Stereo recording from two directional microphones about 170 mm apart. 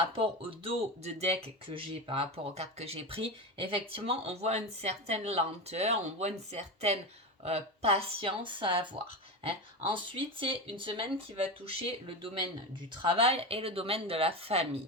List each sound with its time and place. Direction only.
0.2 s speech: 35° right (ahead or behind)